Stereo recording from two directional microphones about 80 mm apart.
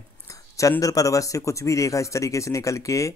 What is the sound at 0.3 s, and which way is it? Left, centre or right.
Speech, left.